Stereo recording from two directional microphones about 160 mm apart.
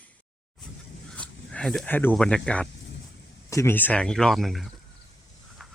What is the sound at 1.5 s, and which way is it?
Speech, 5° left (ahead or behind).